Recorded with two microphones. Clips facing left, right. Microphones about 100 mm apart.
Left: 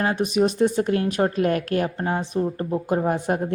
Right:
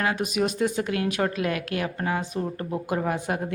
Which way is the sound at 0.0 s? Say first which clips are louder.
Left 4 dB; 35° left (ahead or behind).